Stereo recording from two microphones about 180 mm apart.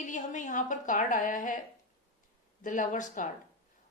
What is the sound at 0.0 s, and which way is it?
A woman's voice, 45° left (ahead or behind).